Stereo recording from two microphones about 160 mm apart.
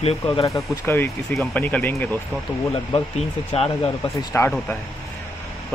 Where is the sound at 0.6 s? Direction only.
15° left (ahead or behind).